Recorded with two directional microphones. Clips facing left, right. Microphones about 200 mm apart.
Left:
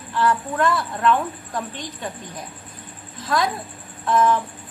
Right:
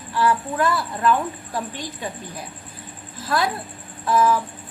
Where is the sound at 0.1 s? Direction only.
10° right (ahead or behind).